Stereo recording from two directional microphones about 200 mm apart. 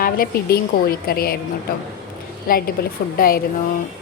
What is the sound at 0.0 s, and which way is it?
A woman's voice, 50° left (ahead or behind).